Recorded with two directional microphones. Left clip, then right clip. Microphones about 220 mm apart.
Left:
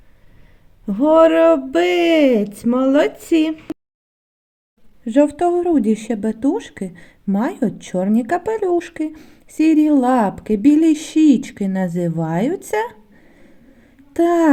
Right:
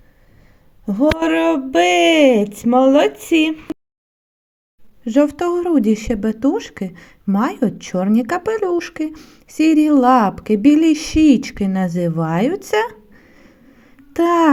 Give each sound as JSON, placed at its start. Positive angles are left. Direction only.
{"t": 0.9, "sound": "speech", "side_deg": -5}
{"t": 5.5, "sound": "a woman's voice", "side_deg": -5}